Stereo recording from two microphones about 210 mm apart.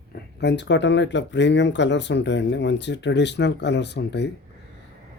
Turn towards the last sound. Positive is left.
turn(degrees=55)  # may be behind; listen again after turning